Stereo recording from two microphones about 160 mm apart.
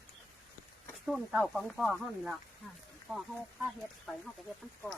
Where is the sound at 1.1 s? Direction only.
Centre (ahead or behind).